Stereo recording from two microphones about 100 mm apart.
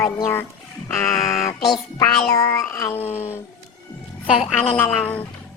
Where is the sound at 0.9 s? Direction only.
35° left (ahead or behind).